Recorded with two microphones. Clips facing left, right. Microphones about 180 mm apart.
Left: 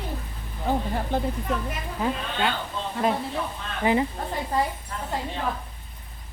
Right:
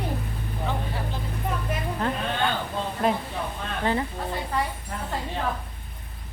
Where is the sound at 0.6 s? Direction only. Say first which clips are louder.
Left 6 dB; 50° left (ahead or behind).